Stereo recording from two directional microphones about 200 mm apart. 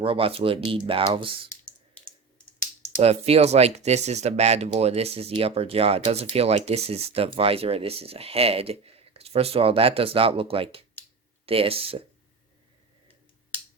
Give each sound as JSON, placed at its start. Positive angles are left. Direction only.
{"t": 0.0, "sound": "speech", "side_deg": -25}
{"t": 2.9, "sound": "speech", "side_deg": -30}